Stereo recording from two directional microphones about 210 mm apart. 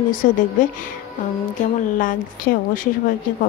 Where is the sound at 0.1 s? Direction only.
40° left (ahead or behind).